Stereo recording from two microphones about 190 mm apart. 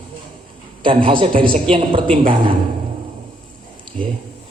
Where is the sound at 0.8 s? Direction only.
30° right (ahead or behind).